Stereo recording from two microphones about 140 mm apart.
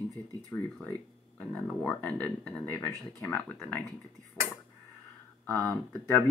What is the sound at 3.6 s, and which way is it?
Speech, centre (ahead or behind).